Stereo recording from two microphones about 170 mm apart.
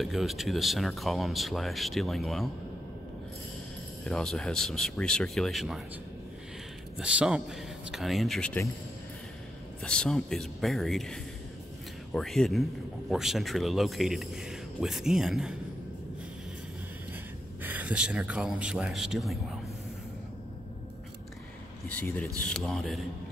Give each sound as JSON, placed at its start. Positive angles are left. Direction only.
{"t": 0.0, "sound": "speech", "side_deg": 0}
{"t": 4.0, "sound": "speech", "side_deg": 5}
{"t": 7.0, "sound": "speech", "side_deg": -5}
{"t": 9.8, "sound": "speech", "side_deg": 5}
{"t": 17.6, "sound": "speech", "side_deg": -10}
{"t": 21.8, "sound": "speech", "side_deg": 10}